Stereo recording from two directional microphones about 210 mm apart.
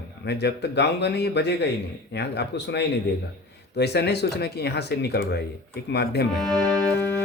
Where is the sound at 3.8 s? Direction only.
50° left (ahead or behind).